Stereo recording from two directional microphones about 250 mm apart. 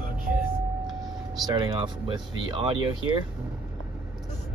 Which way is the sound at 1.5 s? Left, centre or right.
Centre.